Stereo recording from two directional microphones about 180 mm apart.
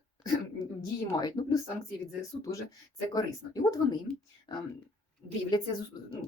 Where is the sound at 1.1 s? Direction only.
20° left (ahead or behind).